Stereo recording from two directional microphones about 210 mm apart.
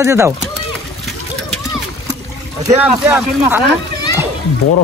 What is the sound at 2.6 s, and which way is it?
Speech, 10° right (ahead or behind).